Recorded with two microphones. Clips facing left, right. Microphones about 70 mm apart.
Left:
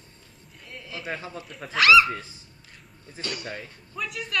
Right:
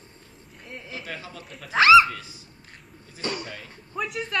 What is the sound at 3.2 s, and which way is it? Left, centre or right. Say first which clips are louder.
A woman's voice: right 2 dB; right.